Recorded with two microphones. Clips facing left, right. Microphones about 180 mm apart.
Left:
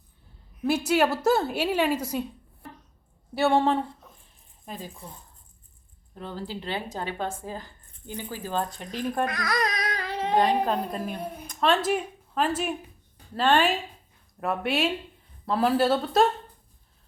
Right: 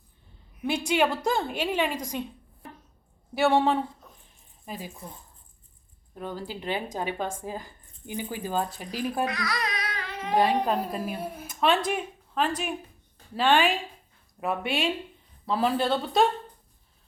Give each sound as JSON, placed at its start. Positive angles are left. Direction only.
{"t": 0.6, "sound": "a woman's voice", "side_deg": 5}
{"t": 3.3, "sound": "speech", "side_deg": 0}
{"t": 6.1, "sound": "speech", "side_deg": -10}
{"t": 9.2, "sound": "baby cry", "side_deg": 50}
{"t": 10.6, "sound": "a woman's voice", "side_deg": 0}